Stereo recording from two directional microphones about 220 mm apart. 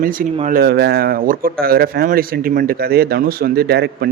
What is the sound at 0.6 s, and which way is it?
Speech, 45° right (ahead or behind).